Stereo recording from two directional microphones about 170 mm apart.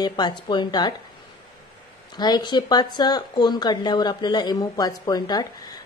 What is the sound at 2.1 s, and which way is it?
A woman's voice, 25° left (ahead or behind).